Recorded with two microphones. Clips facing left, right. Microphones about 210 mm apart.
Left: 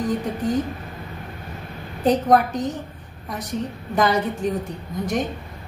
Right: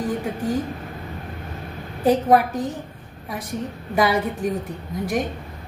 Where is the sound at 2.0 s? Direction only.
10° right (ahead or behind).